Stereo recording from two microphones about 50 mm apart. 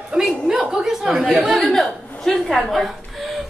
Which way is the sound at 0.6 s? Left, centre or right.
Centre.